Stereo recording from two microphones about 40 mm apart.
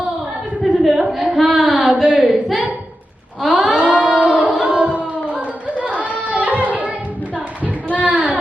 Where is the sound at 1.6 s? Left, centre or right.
Right.